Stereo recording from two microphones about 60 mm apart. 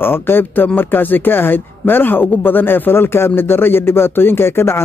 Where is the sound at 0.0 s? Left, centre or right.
Left.